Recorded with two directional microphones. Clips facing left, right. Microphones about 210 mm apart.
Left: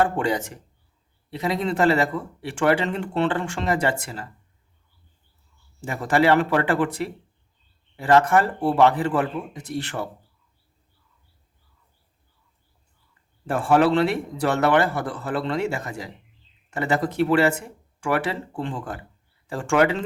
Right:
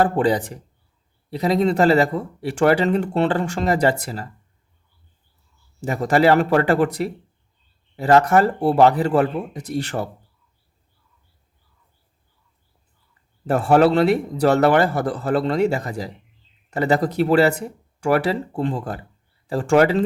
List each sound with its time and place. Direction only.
0.0 s speech: 35° right (ahead or behind)
5.8 s speech: 40° right (ahead or behind)
13.5 s speech: 40° right (ahead or behind)